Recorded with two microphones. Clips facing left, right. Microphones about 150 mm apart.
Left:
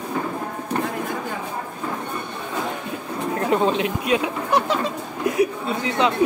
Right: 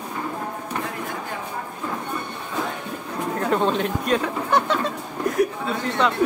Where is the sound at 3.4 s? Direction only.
5° left (ahead or behind).